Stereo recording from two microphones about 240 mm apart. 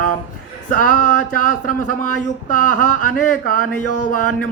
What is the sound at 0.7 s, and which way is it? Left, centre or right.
Speech, left.